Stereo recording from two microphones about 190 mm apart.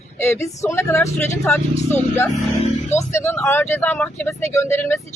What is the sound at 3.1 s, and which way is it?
Speech, 15° left (ahead or behind).